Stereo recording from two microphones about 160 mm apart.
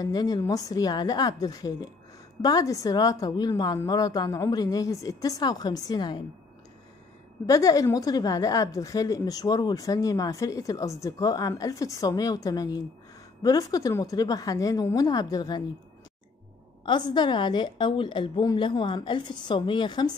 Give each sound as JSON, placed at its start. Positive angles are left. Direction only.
{"t": 0.0, "sound": "a woman's voice", "side_deg": 25}
{"t": 7.4, "sound": "a woman's voice", "side_deg": 20}
{"t": 16.8, "sound": "a woman's voice", "side_deg": 30}